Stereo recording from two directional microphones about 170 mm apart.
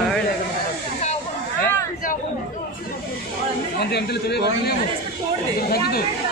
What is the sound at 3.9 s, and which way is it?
Speech, 75° left (ahead or behind).